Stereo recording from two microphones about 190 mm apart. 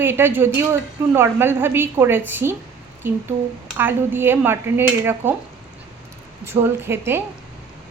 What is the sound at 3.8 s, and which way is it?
A woman's voice, 10° right (ahead or behind).